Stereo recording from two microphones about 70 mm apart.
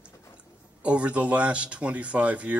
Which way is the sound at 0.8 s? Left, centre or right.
Centre.